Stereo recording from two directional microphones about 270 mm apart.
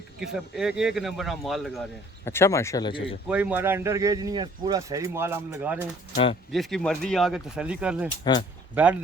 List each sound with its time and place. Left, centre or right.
0.2 s speech: centre
3.2 s speech: centre
8.2 s speech: centre
8.7 s speech: centre